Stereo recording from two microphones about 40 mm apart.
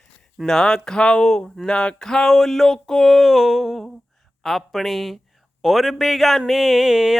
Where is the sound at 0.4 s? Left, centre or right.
Centre.